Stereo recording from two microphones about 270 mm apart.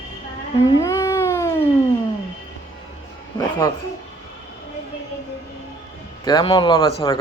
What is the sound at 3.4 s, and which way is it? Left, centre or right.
Speech, centre.